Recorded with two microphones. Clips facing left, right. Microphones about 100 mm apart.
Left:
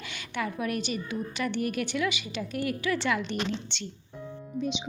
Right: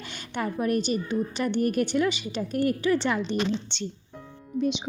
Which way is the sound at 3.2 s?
15° right (ahead or behind).